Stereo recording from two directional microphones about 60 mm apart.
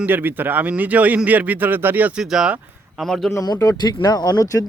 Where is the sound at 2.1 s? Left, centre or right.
Centre.